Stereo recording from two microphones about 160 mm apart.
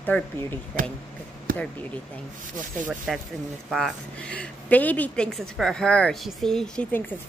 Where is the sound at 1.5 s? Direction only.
60° right (ahead or behind).